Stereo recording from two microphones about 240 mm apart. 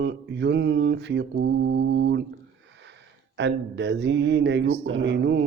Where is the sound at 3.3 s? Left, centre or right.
Right.